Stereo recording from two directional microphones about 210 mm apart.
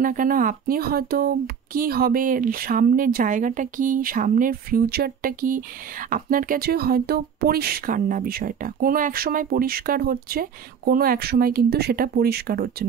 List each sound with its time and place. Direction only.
0.0 s speech: 40° right (ahead or behind)